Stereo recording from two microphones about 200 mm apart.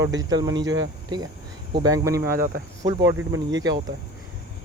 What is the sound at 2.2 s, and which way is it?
Speech, 45° right (ahead or behind).